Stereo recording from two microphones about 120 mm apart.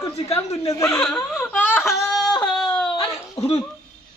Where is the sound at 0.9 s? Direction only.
5° left (ahead or behind).